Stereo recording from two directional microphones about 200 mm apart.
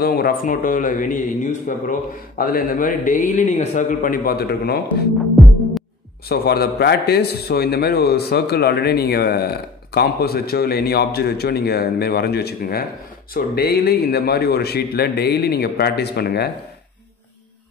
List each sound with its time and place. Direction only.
0.0 s a man's voice: 50° left (ahead or behind)
6.2 s a man's voice: 50° left (ahead or behind)